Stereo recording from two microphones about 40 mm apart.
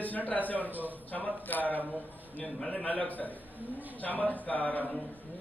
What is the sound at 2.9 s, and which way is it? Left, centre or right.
A man's voice, left.